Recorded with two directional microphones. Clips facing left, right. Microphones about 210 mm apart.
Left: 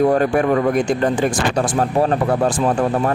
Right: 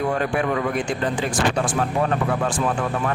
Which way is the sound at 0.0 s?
40° left (ahead or behind).